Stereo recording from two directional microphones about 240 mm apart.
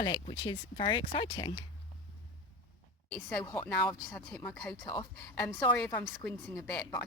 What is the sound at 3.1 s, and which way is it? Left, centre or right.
A woman's voice, centre.